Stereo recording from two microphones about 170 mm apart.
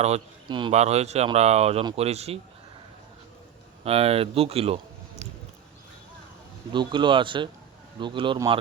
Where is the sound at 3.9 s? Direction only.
35° right (ahead or behind).